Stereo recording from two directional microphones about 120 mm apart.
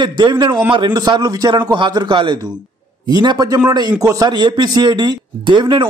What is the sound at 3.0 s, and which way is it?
A man's voice, 35° right (ahead or behind).